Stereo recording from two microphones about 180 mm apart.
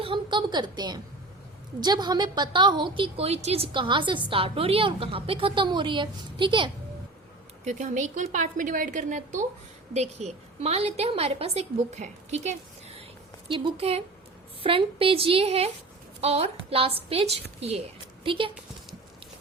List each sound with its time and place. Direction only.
0.0 s a woman's voice: 25° right (ahead or behind)
7.6 s a woman's voice: 40° right (ahead or behind)